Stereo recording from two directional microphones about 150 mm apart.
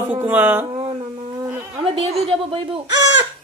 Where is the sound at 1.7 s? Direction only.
40° right (ahead or behind).